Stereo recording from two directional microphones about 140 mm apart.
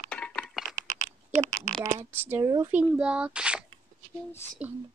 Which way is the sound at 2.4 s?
30° right (ahead or behind).